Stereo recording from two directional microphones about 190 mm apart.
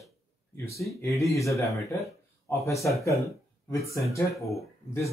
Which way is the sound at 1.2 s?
15° left (ahead or behind).